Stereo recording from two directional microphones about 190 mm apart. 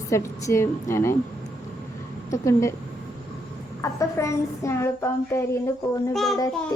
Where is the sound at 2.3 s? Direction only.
15° left (ahead or behind).